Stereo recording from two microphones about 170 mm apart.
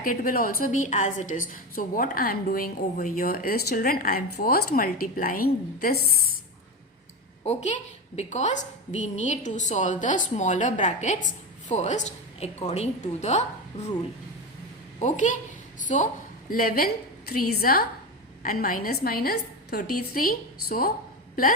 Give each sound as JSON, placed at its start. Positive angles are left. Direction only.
{"t": 0.0, "sound": "a woman's voice", "side_deg": 55}
{"t": 7.4, "sound": "a woman's voice", "side_deg": 40}
{"t": 14.9, "sound": "a woman's voice", "side_deg": 45}
{"t": 16.5, "sound": "a woman's voice", "side_deg": 55}